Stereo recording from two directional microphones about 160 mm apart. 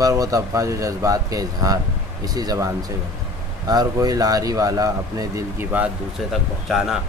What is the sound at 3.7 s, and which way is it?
Speech, 25° right (ahead or behind).